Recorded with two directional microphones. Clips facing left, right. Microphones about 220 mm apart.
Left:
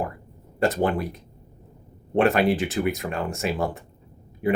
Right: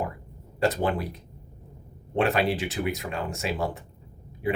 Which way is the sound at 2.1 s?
50° left (ahead or behind).